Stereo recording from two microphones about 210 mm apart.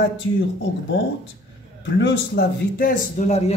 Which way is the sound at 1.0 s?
60° left (ahead or behind).